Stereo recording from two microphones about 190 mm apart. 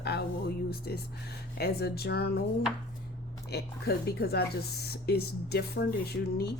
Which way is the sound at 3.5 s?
55° left (ahead or behind).